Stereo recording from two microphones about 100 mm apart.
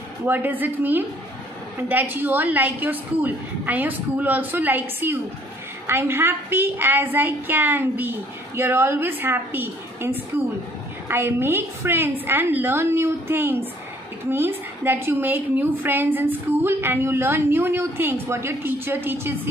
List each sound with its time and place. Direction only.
0.3 s a woman's voice: 20° right (ahead or behind)